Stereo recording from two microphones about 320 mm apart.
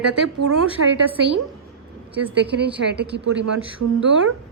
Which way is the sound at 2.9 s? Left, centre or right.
Right.